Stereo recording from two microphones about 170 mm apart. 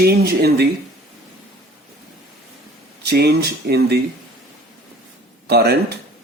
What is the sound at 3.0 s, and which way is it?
Speech, 70° right (ahead or behind).